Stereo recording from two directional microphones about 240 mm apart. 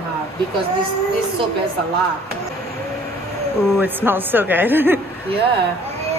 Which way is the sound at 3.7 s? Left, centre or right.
Centre.